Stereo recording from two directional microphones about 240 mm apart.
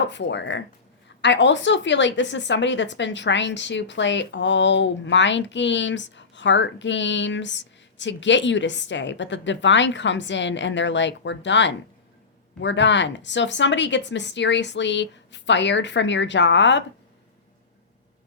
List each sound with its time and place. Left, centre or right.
0.1 s a woman's voice: left